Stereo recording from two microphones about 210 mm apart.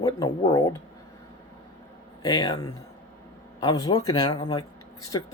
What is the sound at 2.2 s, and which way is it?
Speech, 15° left (ahead or behind).